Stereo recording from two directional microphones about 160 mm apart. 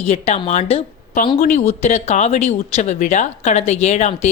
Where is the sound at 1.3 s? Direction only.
50° left (ahead or behind).